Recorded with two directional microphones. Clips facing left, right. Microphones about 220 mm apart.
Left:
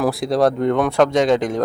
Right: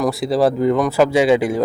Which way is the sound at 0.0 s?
Centre (ahead or behind).